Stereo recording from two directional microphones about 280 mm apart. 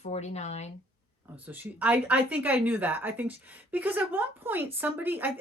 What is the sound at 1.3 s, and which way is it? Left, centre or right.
A woman's voice, centre.